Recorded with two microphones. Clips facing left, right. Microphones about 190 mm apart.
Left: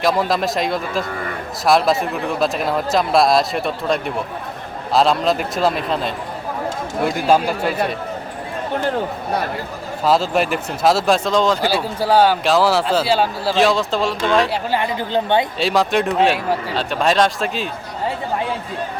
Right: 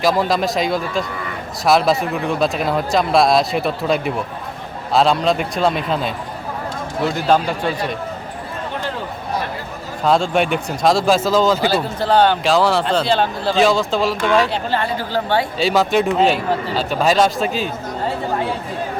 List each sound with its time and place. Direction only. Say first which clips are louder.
0.0 s speech: right 1 dB; centre (ahead or behind)
7.3 s speech: left 1 dB; 5° left (ahead or behind)
10.0 s speech: right 1 dB; 5° left (ahead or behind)
11.7 s speech: even; 10° left (ahead or behind)
14.7 s speech: left 1 dB; 15° left (ahead or behind)
15.5 s speech: right 1 dB; centre (ahead or behind)